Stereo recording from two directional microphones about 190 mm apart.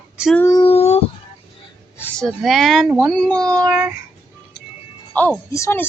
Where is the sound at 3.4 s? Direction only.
20° right (ahead or behind).